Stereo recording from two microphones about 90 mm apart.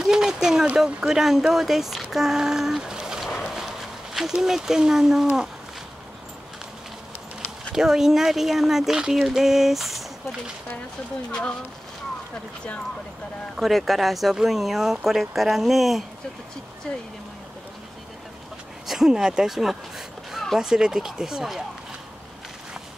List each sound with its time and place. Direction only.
0.0 s speech: 5° right (ahead or behind)
7.7 s speech: 5° right (ahead or behind)
13.6 s speech: centre (ahead or behind)
18.9 s speech: 5° right (ahead or behind)